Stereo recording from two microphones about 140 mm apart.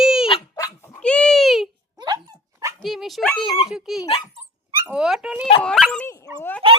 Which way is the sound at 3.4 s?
30° left (ahead or behind).